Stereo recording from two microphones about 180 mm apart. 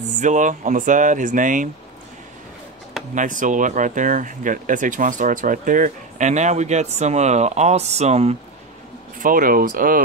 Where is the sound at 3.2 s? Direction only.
45° right (ahead or behind).